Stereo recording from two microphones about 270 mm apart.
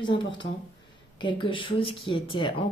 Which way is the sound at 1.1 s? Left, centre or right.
Centre.